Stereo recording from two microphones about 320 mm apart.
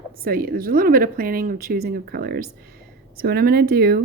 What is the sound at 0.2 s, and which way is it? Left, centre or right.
Speech, right.